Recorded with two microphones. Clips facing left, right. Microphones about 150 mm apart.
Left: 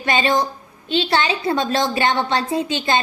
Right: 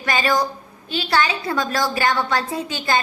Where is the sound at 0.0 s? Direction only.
25° left (ahead or behind).